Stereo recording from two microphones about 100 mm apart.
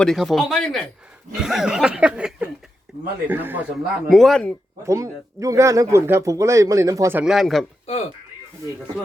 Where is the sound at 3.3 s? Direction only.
20° right (ahead or behind).